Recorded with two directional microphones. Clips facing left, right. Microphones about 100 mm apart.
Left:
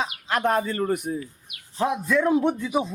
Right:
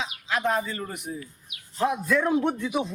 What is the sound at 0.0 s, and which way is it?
Speech, 50° left (ahead or behind).